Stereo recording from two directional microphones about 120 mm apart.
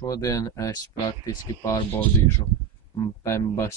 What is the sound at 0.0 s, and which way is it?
Speech, 30° left (ahead or behind).